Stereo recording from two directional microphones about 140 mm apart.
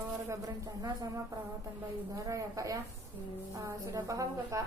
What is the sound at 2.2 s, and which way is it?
A woman's voice, 25° right (ahead or behind).